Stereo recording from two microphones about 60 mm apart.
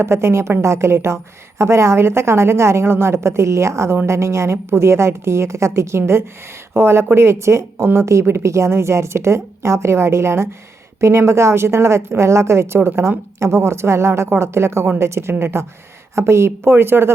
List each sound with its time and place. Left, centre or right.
0.0 s a woman's voice: right
16.1 s a woman's voice: right